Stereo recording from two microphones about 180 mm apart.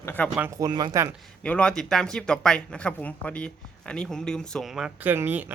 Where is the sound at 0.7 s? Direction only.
25° right (ahead or behind).